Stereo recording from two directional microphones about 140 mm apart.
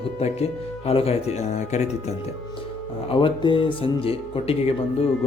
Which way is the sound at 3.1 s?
35° left (ahead or behind).